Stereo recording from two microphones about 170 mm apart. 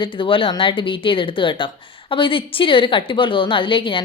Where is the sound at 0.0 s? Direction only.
30° left (ahead or behind).